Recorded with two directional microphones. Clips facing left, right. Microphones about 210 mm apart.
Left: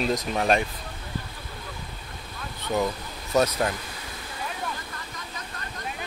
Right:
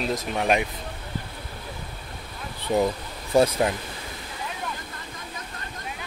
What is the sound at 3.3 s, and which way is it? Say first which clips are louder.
Speech: right 3 dB; 30° right (ahead or behind).